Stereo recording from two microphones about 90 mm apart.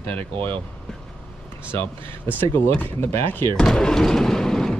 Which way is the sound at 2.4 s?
30° left (ahead or behind).